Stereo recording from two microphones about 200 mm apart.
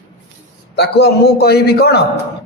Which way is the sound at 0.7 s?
55° left (ahead or behind).